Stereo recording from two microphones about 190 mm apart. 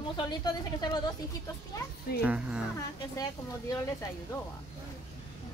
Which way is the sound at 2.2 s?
5° right (ahead or behind).